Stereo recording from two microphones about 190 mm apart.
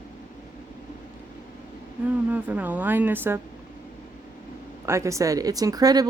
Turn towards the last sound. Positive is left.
turn(degrees=-20)  # may be behind; listen again after turning